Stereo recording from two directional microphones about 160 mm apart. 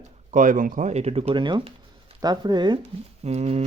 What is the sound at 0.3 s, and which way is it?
Speech, 55° right (ahead or behind).